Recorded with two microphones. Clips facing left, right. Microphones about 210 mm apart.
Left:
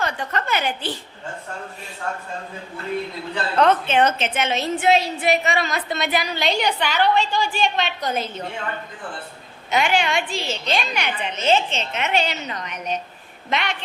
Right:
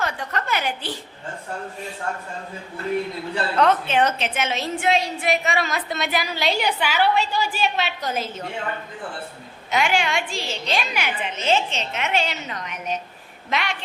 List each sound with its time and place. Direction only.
0.0 s a woman's voice: centre (ahead or behind)
3.6 s a woman's voice: centre (ahead or behind)
9.6 s a woman's voice: centre (ahead or behind)